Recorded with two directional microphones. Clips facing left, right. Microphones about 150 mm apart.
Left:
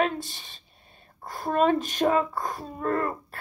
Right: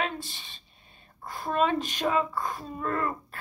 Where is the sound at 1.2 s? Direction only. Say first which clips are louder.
Left 3 dB; 40° left (ahead or behind).